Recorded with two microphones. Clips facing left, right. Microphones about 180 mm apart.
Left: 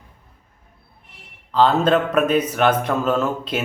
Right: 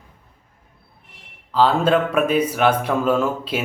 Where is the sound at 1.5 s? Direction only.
5° right (ahead or behind).